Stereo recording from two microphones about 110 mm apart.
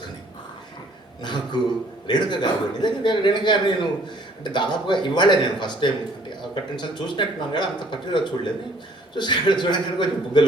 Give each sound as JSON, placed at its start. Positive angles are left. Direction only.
{"t": 1.2, "sound": "a man's voice", "side_deg": 40}